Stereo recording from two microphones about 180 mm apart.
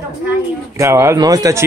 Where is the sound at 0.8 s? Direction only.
15° right (ahead or behind).